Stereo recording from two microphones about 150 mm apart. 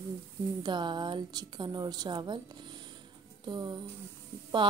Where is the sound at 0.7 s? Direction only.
30° right (ahead or behind).